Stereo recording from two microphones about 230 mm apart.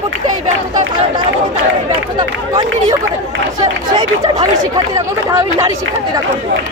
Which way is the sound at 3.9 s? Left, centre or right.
Centre.